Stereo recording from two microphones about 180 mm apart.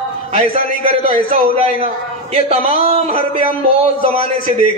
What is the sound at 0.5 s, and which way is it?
Speech, 50° left (ahead or behind).